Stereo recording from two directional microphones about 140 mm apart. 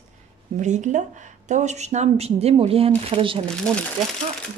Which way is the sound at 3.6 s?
5° left (ahead or behind).